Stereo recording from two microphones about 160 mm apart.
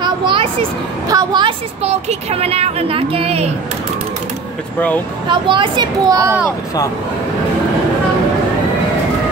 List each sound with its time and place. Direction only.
0.0 s a sound: 30° right (ahead or behind)
1.0 s speech: 25° right (ahead or behind)
1.9 s speech: 40° right (ahead or behind)
4.7 s speech: 10° left (ahead or behind)
5.3 s speech: 30° right (ahead or behind)